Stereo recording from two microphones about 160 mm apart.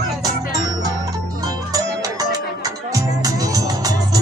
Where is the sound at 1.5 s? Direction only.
25° right (ahead or behind).